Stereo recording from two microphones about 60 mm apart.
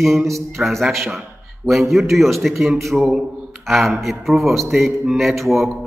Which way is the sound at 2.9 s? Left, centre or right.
Centre.